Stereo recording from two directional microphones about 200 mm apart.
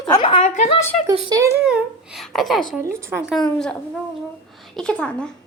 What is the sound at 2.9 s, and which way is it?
Speech, 15° right (ahead or behind).